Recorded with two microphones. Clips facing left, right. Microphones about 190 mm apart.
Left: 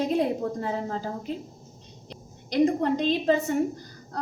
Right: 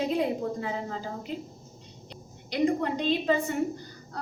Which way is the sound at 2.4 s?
45° left (ahead or behind).